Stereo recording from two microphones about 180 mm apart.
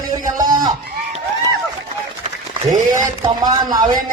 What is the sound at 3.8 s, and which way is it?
Music, 50° right (ahead or behind).